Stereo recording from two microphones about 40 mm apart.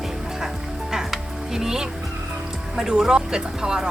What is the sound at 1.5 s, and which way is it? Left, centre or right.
Speech, centre.